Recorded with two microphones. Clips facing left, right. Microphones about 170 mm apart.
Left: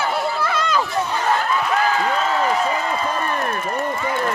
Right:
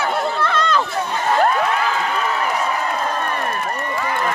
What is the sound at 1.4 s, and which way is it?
Crowd, 60° right (ahead or behind).